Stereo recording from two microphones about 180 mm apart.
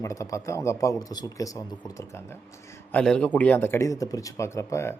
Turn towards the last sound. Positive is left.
turn(degrees=15)  # may be behind; listen again after turning